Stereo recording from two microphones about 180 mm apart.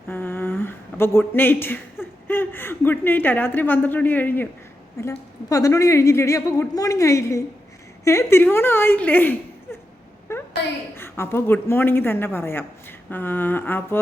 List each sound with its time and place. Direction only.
0.1 s a woman's voice: 10° left (ahead or behind)
10.3 s a sound: 15° left (ahead or behind)
10.9 s a woman's voice: 15° left (ahead or behind)